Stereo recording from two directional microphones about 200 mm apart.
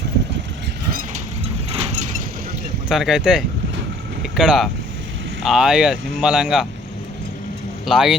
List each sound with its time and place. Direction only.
1.7 s vehicle: 35° right (ahead or behind)
2.9 s speech: centre (ahead or behind)
7.9 s speech: centre (ahead or behind)